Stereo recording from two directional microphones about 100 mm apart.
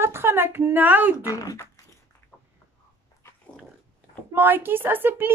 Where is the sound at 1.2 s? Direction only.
35° left (ahead or behind).